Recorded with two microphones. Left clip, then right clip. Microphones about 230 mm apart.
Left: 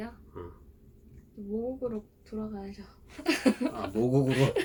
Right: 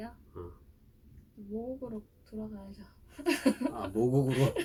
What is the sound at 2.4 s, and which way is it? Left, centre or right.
Speech, centre.